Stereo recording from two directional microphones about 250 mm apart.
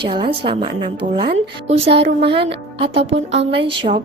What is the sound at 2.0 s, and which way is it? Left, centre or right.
Speech, right.